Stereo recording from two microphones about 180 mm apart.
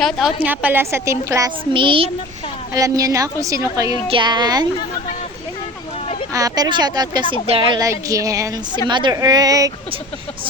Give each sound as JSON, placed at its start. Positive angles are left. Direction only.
{"t": 0.0, "sound": "a woman's voice", "side_deg": 0}
{"t": 1.7, "sound": "a woman's voice", "side_deg": -30}
{"t": 6.3, "sound": "a woman's voice", "side_deg": -20}